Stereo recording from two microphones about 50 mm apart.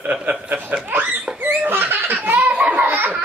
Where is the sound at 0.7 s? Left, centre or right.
Right.